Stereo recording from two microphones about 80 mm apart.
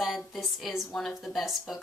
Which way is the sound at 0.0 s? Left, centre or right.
Centre.